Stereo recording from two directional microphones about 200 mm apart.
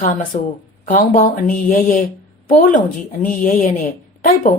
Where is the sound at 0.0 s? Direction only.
45° left (ahead or behind).